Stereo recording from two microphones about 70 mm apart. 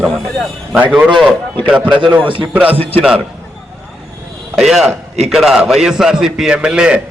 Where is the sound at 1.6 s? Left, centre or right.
Centre.